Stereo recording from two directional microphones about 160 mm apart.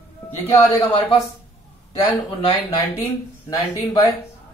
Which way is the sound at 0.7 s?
35° left (ahead or behind).